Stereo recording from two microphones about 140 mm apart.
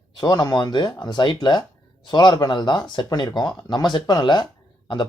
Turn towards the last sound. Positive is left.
turn(degrees=35)  # may be behind; listen again after turning